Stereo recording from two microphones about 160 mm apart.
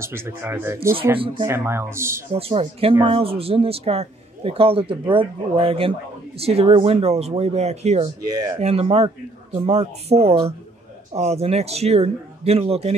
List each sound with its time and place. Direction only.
0.0 s speech: 15° right (ahead or behind)
2.3 s a man's voice: 35° right (ahead or behind)
8.2 s speech: 20° right (ahead or behind)
8.5 s a man's voice: 40° right (ahead or behind)